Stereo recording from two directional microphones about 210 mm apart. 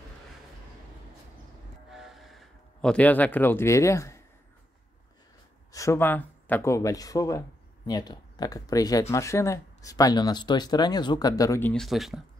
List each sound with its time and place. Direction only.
1.9 s a sound: centre (ahead or behind)
5.7 s speech: 15° left (ahead or behind)
11.7 s speech: centre (ahead or behind)